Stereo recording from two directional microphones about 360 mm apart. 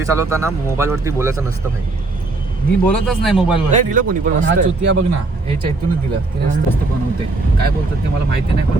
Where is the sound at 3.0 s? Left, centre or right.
Centre.